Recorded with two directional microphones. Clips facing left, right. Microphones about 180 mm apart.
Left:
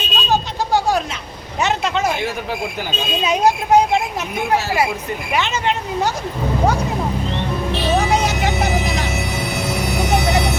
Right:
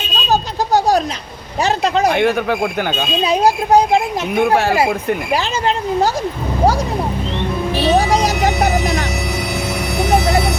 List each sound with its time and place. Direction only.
0.3 s a sound: 40° right (ahead or behind)
1.6 s speech: 35° right (ahead or behind)
2.0 s speech: 60° right (ahead or behind)
3.2 s speech: 35° right (ahead or behind)
4.4 s speech: 55° right (ahead or behind)
5.3 s speech: 35° right (ahead or behind)
7.9 s music: 35° right (ahead or behind)